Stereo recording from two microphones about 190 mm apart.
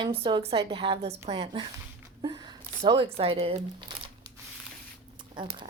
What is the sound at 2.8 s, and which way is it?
Speech, 25° right (ahead or behind).